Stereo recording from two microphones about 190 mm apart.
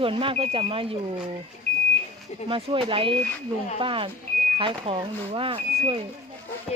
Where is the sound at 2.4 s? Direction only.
30° right (ahead or behind).